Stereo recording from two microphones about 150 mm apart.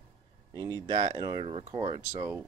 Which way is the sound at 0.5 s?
25° right (ahead or behind).